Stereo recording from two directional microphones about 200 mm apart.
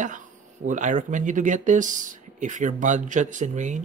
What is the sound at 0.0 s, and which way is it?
Speech, 40° right (ahead or behind).